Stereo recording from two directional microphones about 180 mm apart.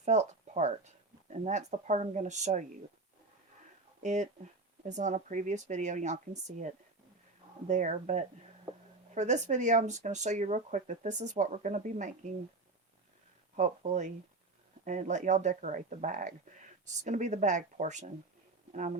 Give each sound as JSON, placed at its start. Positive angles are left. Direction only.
{"t": 0.0, "sound": "speech", "side_deg": -40}
{"t": 4.0, "sound": "speech", "side_deg": -40}
{"t": 13.6, "sound": "speech", "side_deg": -40}